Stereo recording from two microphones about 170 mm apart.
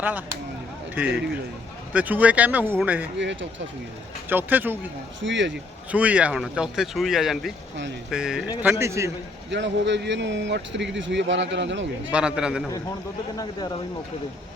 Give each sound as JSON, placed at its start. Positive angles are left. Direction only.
{"t": 0.0, "sound": "speech", "side_deg": -10}
{"t": 3.2, "sound": "speech", "side_deg": -90}
{"t": 4.3, "sound": "speech", "side_deg": -10}
{"t": 5.2, "sound": "speech", "side_deg": -90}
{"t": 5.9, "sound": "speech", "side_deg": -10}
{"t": 8.6, "sound": "speech", "side_deg": -15}
{"t": 9.5, "sound": "speech", "side_deg": -90}
{"t": 12.1, "sound": "speech", "side_deg": -5}
{"t": 13.3, "sound": "speech", "side_deg": 25}